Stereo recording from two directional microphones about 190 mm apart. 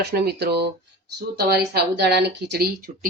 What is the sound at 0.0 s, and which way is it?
Speech, 60° right (ahead or behind).